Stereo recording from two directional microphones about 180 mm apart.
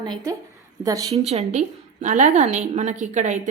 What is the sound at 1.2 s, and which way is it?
A woman's voice, 40° right (ahead or behind).